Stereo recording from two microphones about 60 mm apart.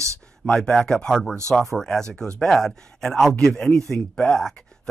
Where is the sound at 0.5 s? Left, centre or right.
Centre.